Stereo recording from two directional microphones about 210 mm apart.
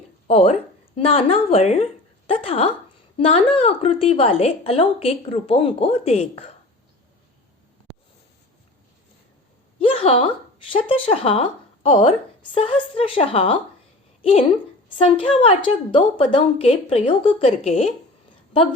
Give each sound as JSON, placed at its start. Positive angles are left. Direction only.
{"t": 0.3, "sound": "a woman's voice", "side_deg": 30}
{"t": 9.7, "sound": "speech", "side_deg": 25}
{"t": 14.9, "sound": "a woman's voice", "side_deg": 25}